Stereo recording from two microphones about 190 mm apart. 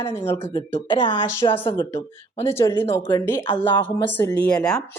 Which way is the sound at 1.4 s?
25° left (ahead or behind).